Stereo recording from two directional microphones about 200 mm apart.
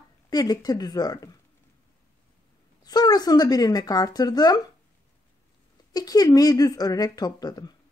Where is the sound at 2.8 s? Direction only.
20° left (ahead or behind).